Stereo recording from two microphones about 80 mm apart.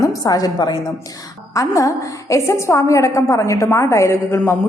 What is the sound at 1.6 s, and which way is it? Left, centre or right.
A woman's voice, left.